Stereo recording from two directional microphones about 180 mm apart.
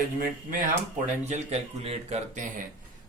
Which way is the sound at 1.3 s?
35° right (ahead or behind).